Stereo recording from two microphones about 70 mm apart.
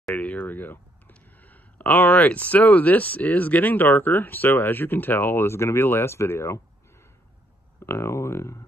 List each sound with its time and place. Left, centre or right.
0.1 s speech: left
7.8 s speech: left